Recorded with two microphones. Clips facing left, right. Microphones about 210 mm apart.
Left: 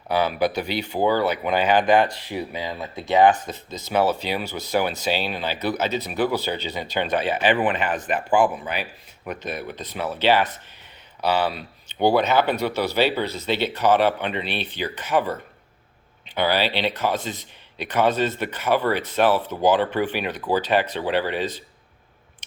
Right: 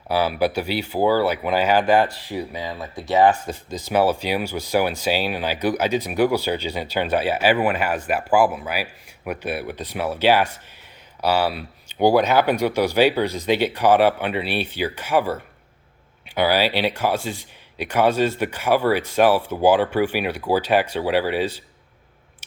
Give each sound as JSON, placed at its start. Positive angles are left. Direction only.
{"t": 0.1, "sound": "speech", "side_deg": -10}
{"t": 2.2, "sound": "speech", "side_deg": 25}
{"t": 3.2, "sound": "speech", "side_deg": -10}